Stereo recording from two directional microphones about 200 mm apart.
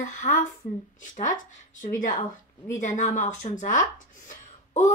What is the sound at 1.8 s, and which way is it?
A woman's voice, 40° left (ahead or behind).